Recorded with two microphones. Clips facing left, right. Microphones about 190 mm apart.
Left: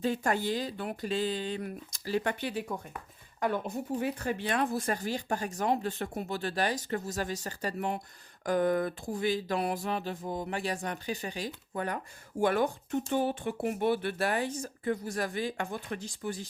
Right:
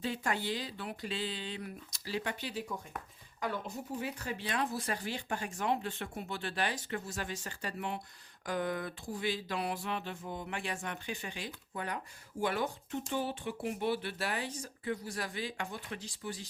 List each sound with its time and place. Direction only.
0.0 s speech: 45° left (ahead or behind)